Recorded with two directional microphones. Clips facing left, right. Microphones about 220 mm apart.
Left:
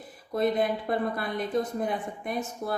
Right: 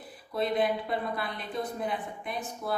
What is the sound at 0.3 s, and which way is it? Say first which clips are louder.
Speech: left 2 dB; 45° left (ahead or behind).